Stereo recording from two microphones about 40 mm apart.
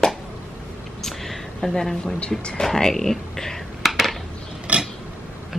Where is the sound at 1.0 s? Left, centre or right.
Centre.